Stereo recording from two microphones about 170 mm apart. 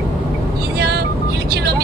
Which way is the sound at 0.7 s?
65° right (ahead or behind).